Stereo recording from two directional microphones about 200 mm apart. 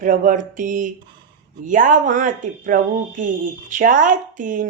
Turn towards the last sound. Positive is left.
turn(degrees=-40)  # may be behind; listen again after turning